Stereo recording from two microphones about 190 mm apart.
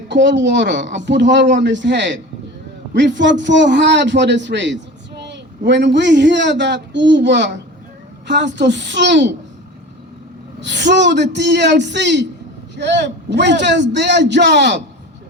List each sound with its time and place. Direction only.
0.1 s a man's voice: 70° right (ahead or behind)
10.6 s a man's voice: 70° right (ahead or behind)